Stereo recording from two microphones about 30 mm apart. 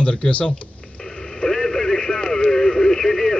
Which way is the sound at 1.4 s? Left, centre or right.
Centre.